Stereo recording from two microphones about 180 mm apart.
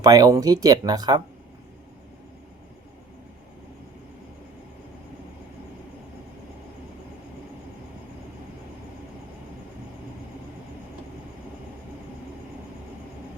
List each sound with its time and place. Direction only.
0.0 s speech: 20° right (ahead or behind)